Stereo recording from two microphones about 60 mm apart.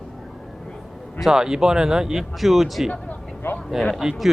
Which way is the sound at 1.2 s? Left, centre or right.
Centre.